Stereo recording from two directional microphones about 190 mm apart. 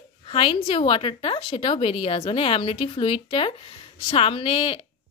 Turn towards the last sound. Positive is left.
turn(degrees=30)  # may be behind; listen again after turning